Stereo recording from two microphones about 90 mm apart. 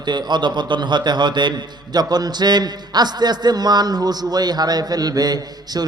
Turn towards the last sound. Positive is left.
turn(degrees=-45)  # may be behind; listen again after turning